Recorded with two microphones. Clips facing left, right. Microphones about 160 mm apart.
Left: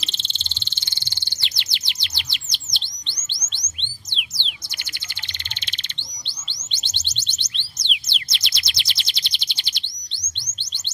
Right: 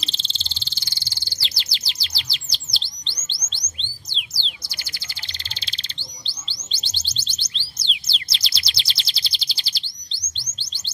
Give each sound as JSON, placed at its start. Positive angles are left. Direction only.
{"t": 0.0, "sound": "bird", "side_deg": -30}
{"t": 5.5, "sound": "bird", "side_deg": -35}